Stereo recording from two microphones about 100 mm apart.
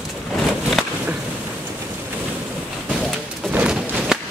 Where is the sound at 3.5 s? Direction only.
15° right (ahead or behind).